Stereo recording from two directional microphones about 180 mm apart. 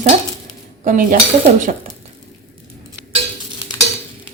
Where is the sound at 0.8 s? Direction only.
50° right (ahead or behind).